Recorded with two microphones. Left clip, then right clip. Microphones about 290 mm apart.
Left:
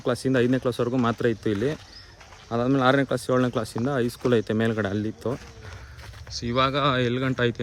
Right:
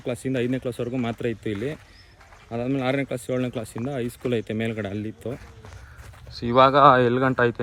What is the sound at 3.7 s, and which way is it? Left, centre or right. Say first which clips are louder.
Speech: left 4 dB; centre.